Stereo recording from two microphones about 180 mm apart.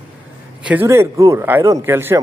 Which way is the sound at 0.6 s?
10° right (ahead or behind).